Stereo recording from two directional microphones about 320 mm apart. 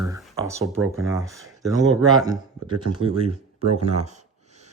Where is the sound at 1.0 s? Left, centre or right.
Centre.